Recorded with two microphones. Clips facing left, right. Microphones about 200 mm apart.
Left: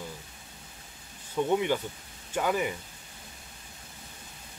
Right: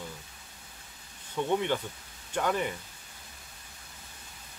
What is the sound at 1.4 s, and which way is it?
Speech, 10° left (ahead or behind).